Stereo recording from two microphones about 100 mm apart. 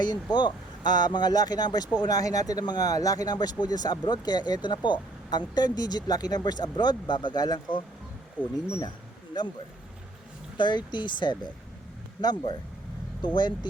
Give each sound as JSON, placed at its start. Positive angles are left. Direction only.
{"t": 0.0, "sound": "speech", "side_deg": 45}
{"t": 10.6, "sound": "speech", "side_deg": 50}